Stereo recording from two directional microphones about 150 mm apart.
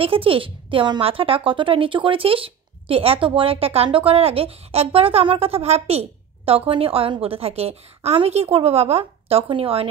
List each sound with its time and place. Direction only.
0.0 s a woman's voice: 40° right (ahead or behind)